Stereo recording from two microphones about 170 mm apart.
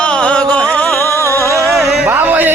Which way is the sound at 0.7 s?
15° left (ahead or behind).